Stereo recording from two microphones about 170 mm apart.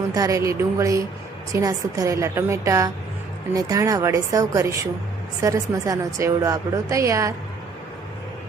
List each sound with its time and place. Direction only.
0.1 s a woman's voice: 20° right (ahead or behind)